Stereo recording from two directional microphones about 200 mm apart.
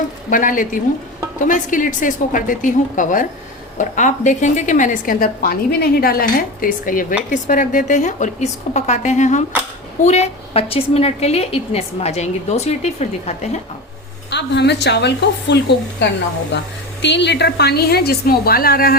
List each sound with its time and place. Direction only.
0.3 s a woman's voice: 40° left (ahead or behind)
14.3 s a woman's voice: 60° left (ahead or behind)